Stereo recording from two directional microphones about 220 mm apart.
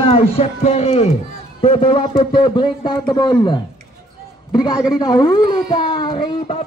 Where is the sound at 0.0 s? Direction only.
25° left (ahead or behind).